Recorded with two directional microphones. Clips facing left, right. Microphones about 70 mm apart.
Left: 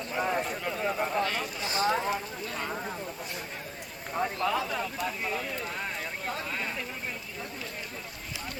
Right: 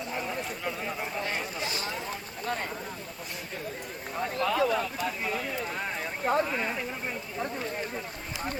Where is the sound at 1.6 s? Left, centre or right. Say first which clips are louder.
Left 6 dB; left.